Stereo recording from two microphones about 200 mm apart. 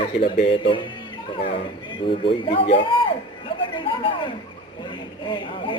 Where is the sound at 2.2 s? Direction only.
25° left (ahead or behind).